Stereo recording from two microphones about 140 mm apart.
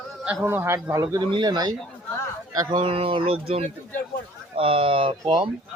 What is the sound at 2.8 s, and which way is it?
Speech, 40° right (ahead or behind).